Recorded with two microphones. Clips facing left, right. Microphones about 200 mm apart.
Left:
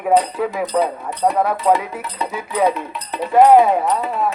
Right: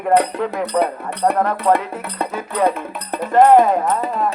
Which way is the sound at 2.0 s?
55° right (ahead or behind).